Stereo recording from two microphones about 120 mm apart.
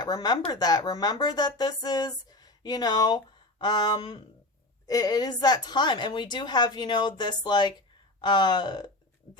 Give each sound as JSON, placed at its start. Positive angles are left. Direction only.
{"t": 0.0, "sound": "a woman's voice", "side_deg": 35}